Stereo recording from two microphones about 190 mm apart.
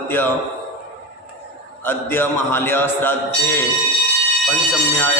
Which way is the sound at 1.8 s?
10° left (ahead or behind).